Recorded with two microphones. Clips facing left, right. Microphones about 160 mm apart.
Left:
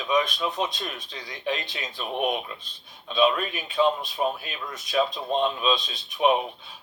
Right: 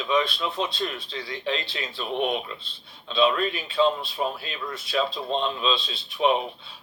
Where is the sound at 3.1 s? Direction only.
15° left (ahead or behind).